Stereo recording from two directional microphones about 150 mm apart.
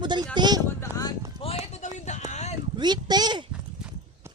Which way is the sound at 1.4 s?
40° left (ahead or behind).